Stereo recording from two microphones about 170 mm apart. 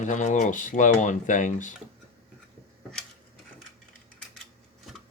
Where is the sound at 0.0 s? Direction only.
45° left (ahead or behind).